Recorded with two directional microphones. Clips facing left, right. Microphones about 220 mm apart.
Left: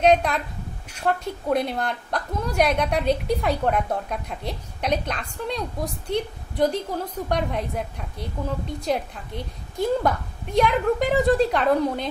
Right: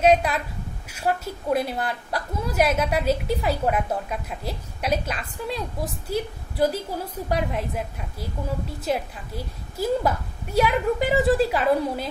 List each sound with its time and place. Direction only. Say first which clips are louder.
0.0 s a woman's voice: even; 5° right (ahead or behind)